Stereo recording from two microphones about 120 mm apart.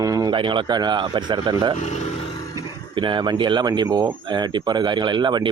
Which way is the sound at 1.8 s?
70° left (ahead or behind).